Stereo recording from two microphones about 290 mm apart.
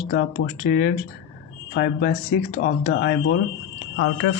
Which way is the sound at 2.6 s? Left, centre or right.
Left.